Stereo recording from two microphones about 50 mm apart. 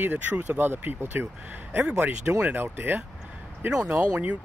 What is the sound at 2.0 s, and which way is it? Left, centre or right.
Speech, right.